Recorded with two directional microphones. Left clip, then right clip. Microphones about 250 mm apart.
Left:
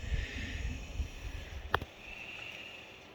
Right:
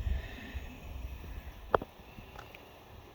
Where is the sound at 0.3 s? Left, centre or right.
Right.